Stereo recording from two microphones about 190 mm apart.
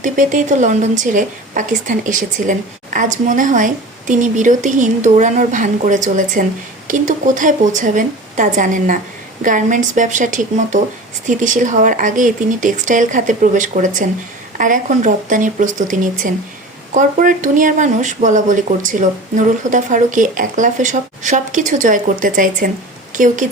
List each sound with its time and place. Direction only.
0.0 s a woman's voice: 40° right (ahead or behind)